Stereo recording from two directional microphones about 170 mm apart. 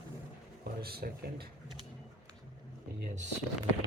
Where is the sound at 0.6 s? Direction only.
65° right (ahead or behind).